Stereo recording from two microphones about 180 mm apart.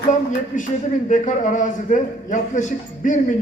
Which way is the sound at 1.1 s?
45° left (ahead or behind).